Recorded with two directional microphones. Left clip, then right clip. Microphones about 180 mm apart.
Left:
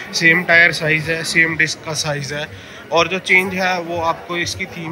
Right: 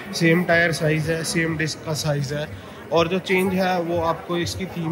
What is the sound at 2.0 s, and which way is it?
Speech, 15° left (ahead or behind).